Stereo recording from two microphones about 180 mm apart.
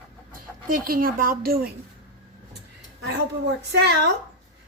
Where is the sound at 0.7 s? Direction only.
50° right (ahead or behind).